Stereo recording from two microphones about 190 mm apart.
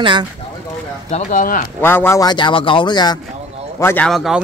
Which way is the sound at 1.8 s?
10° left (ahead or behind).